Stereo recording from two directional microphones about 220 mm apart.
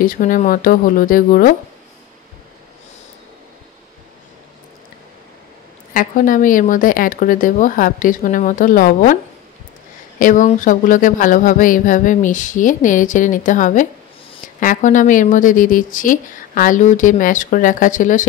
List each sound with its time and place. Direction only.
0.0 s speech: 40° left (ahead or behind)
5.9 s speech: 40° left (ahead or behind)